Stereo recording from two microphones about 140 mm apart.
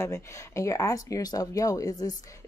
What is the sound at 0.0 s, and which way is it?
Speech, 20° left (ahead or behind).